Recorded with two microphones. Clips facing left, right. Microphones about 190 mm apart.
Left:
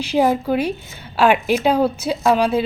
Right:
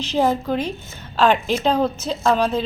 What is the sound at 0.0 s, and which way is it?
A woman's voice, 10° left (ahead or behind).